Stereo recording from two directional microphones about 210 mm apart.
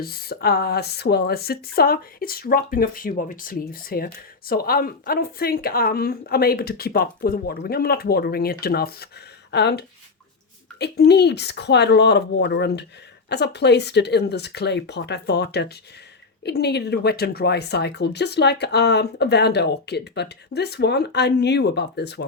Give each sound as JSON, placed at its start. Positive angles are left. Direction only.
{"t": 0.0, "sound": "speech", "side_deg": 45}